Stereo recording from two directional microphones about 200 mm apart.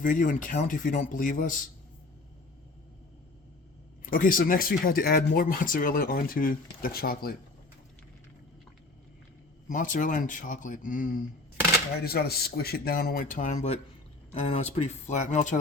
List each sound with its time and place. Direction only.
0.0 s speech: 40° left (ahead or behind)
4.0 s speech: 45° left (ahead or behind)
9.6 s speech: 40° left (ahead or behind)
12.0 s speech: 50° left (ahead or behind); by 15.5 s 35° left (ahead or behind)